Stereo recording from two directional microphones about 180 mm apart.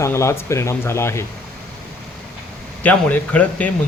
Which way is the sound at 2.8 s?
10° left (ahead or behind).